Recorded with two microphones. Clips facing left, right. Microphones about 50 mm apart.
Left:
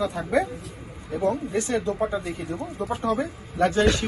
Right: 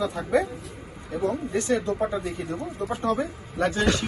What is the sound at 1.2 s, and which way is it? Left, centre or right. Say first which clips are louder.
Speech: left 2 dB; left.